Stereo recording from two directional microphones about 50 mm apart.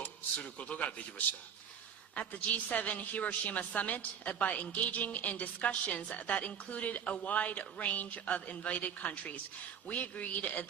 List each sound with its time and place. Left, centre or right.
0.4 s a man's voice: left
2.1 s a woman's voice: left